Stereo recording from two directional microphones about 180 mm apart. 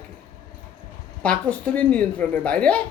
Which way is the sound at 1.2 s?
5° left (ahead or behind).